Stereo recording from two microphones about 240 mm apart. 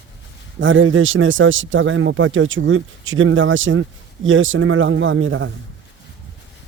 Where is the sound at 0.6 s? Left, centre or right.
Right.